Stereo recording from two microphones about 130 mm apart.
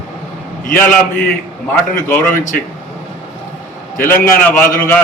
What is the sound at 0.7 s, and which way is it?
Speech, 15° left (ahead or behind).